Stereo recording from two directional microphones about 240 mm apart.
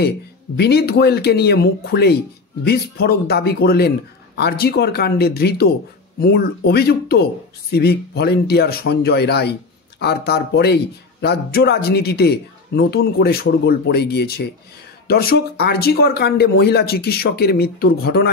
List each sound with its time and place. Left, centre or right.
0.6 s speech: left